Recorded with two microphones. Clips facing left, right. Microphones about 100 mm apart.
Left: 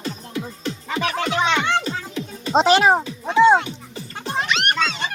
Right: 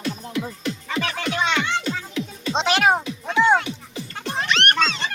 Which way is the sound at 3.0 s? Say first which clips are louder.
Left 4 dB; 25° left (ahead or behind).